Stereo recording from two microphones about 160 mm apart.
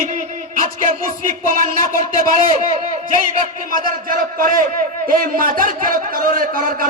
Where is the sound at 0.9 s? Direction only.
60° right (ahead or behind).